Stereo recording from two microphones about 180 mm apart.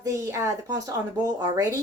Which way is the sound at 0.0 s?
15° right (ahead or behind).